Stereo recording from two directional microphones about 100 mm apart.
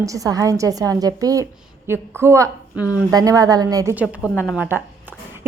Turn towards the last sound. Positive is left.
turn(degrees=-20)  # may be behind; listen again after turning